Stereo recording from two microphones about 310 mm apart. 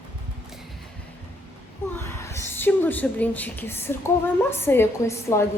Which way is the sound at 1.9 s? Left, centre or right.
Centre.